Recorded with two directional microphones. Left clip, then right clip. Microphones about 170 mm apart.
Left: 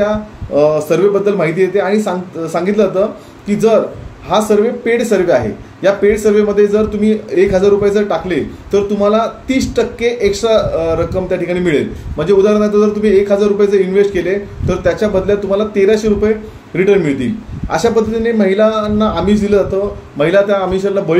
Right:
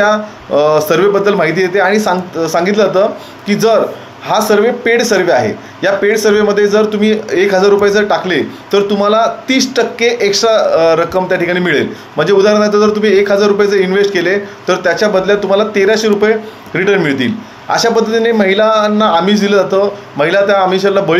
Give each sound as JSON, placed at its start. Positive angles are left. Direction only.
{"t": 0.0, "sound": "a man's voice", "side_deg": 25}